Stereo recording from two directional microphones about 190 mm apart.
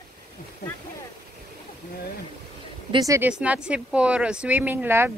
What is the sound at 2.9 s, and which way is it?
Speech, 15° right (ahead or behind).